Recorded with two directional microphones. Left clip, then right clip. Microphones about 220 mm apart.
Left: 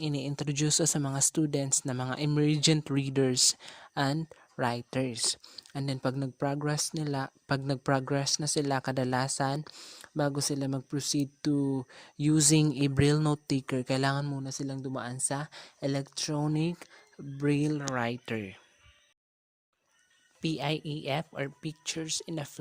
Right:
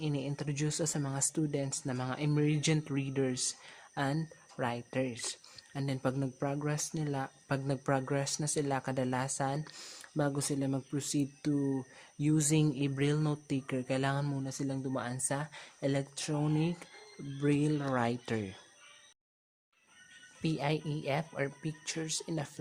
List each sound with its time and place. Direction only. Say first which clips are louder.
0.0 s speech: left 3 dB; 45° left (ahead or behind); by 18.6 s 25° left (ahead or behind)
20.4 s speech: left 2 dB; 35° left (ahead or behind)